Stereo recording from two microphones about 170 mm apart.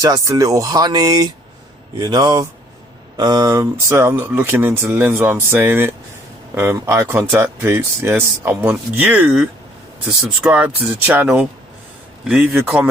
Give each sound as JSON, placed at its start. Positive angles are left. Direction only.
{"t": 0.0, "sound": "speech", "side_deg": -20}